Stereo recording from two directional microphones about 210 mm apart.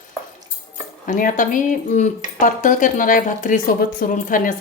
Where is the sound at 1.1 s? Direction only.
40° left (ahead or behind).